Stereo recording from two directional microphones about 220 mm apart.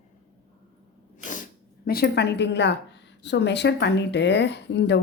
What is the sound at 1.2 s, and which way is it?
Speech, 35° left (ahead or behind).